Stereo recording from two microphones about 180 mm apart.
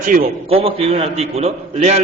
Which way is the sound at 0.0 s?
50° right (ahead or behind).